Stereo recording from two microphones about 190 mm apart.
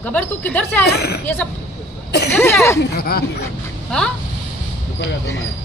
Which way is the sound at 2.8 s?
55° left (ahead or behind).